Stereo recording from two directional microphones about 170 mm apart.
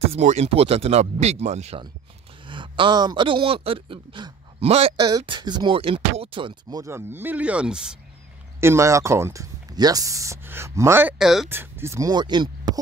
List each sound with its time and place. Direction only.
0.1 s speech: 40° right (ahead or behind)
5.1 s speech: 25° right (ahead or behind); by 7.9 s 5° right (ahead or behind)
8.5 s speech: 15° right (ahead or behind)
11.4 s speech: 15° right (ahead or behind)